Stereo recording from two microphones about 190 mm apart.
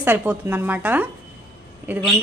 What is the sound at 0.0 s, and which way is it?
A woman's voice, 10° right (ahead or behind).